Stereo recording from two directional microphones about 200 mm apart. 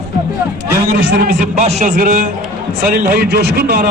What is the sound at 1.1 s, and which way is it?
A man's voice, 45° right (ahead or behind).